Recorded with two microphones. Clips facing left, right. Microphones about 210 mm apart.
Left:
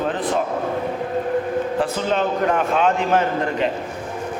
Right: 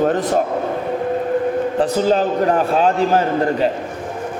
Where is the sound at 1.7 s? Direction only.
35° right (ahead or behind).